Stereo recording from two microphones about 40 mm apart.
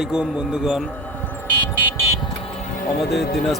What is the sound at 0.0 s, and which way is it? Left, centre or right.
Speech, right.